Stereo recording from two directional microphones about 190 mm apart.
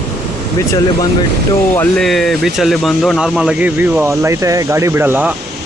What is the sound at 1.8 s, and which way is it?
Speech, centre (ahead or behind).